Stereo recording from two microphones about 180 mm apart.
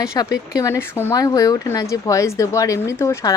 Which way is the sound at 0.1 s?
20° left (ahead or behind).